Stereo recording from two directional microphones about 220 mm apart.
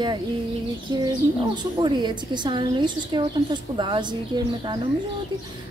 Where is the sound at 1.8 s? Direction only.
20° right (ahead or behind).